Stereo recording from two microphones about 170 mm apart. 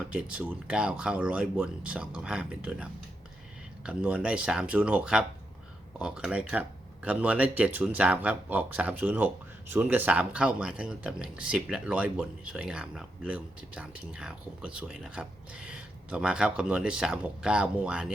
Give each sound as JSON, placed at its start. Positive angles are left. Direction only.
{"t": 0.1, "sound": "speech", "side_deg": -5}